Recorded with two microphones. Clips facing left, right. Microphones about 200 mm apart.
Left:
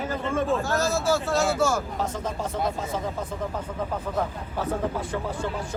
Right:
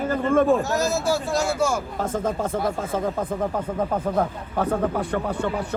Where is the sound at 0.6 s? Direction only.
15° right (ahead or behind).